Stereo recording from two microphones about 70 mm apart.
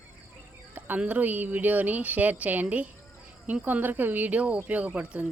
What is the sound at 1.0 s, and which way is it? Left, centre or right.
A woman's voice, right.